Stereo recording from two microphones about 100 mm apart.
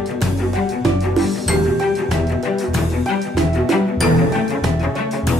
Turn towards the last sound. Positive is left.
turn(degrees=0)  # may be behind; listen again after turning